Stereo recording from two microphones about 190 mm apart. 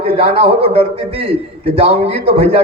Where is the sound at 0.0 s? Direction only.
30° right (ahead or behind).